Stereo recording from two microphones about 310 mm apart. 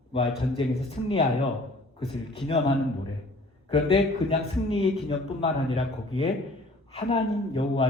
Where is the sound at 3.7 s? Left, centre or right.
Centre.